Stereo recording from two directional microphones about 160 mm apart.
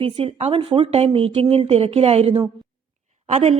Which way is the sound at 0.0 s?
35° right (ahead or behind).